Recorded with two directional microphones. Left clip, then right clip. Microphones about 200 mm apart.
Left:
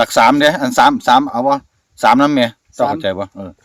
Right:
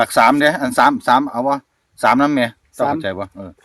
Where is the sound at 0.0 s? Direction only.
55° left (ahead or behind).